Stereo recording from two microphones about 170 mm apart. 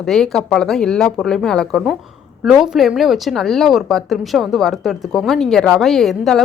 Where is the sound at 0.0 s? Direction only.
Centre (ahead or behind).